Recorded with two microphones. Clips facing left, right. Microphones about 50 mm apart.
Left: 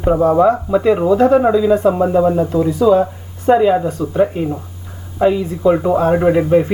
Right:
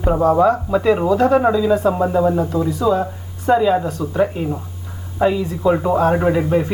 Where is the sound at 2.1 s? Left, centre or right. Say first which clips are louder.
Left 3 dB; centre.